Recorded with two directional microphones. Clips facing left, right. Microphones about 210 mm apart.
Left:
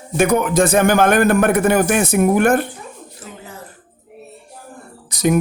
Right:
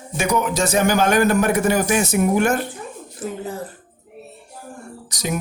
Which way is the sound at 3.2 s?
50° right (ahead or behind).